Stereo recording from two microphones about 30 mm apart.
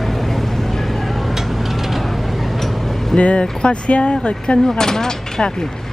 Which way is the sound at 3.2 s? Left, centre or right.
Left.